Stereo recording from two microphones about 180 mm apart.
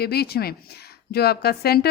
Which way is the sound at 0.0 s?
60° left (ahead or behind).